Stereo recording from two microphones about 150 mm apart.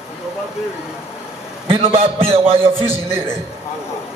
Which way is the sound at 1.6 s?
40° right (ahead or behind).